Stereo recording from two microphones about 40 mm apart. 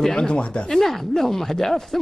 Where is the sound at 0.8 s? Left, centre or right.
Centre.